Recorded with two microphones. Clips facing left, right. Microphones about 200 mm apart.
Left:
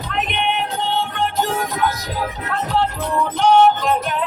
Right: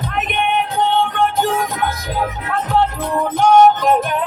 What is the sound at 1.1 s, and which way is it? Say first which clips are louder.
Music: right 4 dB; 55° right (ahead or behind).